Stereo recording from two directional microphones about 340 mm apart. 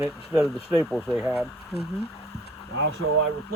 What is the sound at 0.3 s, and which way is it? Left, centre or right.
Speech, centre.